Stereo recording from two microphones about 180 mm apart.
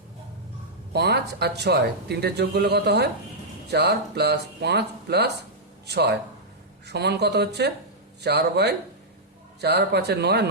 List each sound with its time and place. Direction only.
0.9 s speech: 65° right (ahead or behind)